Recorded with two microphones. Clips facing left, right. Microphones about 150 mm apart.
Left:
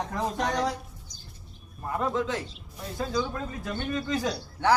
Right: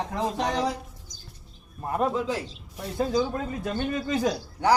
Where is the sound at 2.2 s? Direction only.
10° right (ahead or behind).